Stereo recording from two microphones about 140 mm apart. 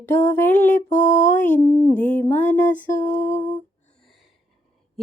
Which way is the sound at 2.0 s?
65° left (ahead or behind).